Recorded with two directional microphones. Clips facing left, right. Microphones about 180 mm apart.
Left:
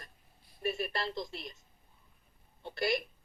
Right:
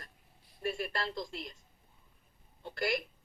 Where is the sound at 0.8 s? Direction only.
20° left (ahead or behind).